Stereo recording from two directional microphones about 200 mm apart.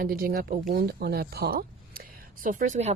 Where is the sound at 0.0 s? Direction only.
45° right (ahead or behind).